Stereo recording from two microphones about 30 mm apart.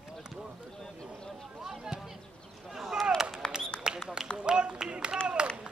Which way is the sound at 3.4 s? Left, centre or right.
Left.